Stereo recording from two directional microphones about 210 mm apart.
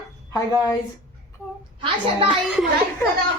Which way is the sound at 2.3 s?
Centre (ahead or behind).